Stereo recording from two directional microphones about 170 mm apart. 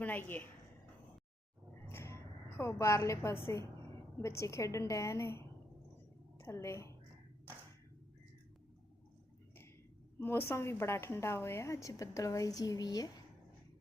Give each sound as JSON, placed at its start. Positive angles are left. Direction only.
{"t": 0.0, "sound": "a woman's voice", "side_deg": 10}
{"t": 1.9, "sound": "a sound", "side_deg": 15}
{"t": 2.6, "sound": "a woman's voice", "side_deg": 15}
{"t": 10.2, "sound": "a woman's voice", "side_deg": 15}